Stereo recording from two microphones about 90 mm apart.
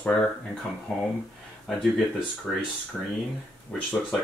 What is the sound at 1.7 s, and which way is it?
Speech, 5° left (ahead or behind).